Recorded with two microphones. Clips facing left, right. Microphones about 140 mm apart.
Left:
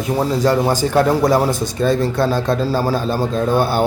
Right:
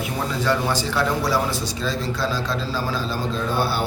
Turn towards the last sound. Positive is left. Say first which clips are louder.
# left 7 dB
turn(degrees=50)  # may be behind; listen again after turning